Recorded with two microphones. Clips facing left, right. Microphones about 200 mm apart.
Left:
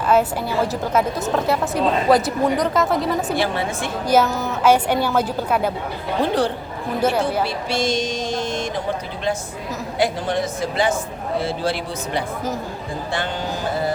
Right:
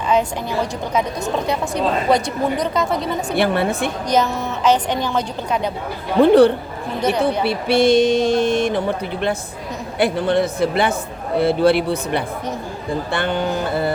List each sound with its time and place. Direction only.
0.1 s a woman's voice: 5° left (ahead or behind)
3.3 s speech: 60° right (ahead or behind)
4.1 s a woman's voice: 5° left (ahead or behind)
6.1 s speech: 60° right (ahead or behind)